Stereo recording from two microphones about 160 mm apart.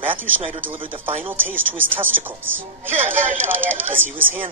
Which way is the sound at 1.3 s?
15° right (ahead or behind).